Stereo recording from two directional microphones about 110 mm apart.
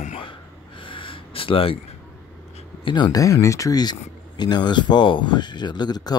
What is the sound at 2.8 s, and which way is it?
Speech, 45° left (ahead or behind).